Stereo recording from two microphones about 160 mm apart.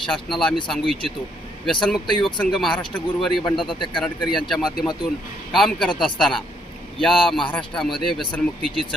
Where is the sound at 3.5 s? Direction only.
30° left (ahead or behind).